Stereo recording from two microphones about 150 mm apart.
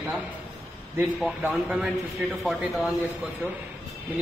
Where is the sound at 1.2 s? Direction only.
Centre (ahead or behind).